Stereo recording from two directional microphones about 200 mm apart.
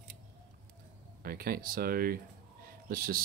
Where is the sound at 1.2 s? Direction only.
50° right (ahead or behind).